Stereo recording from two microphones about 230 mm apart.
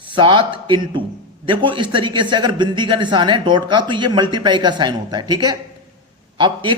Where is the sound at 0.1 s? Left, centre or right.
Right.